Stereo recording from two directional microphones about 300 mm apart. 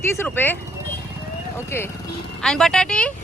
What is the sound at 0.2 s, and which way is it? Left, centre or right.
Speech, centre.